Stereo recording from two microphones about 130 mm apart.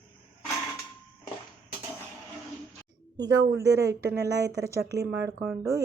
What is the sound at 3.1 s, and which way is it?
Speech, 25° right (ahead or behind).